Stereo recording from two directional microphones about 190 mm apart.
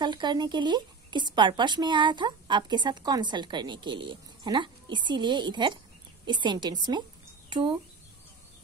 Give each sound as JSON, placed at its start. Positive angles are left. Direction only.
{"t": 0.0, "sound": "speech", "side_deg": -25}